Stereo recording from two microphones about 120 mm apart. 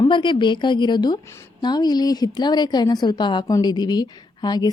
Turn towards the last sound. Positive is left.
turn(degrees=35)  # may be behind; listen again after turning